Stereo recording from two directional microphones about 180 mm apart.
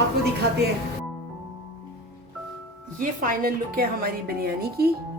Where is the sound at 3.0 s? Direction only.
50° right (ahead or behind).